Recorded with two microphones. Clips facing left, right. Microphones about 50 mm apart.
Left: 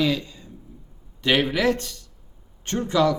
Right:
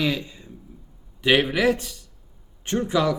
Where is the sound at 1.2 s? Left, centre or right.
Centre.